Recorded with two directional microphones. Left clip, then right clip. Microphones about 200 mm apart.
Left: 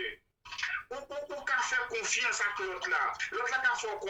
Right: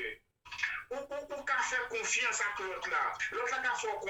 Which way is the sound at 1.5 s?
30° left (ahead or behind).